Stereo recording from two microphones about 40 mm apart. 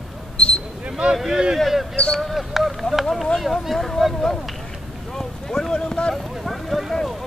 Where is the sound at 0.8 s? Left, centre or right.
Right.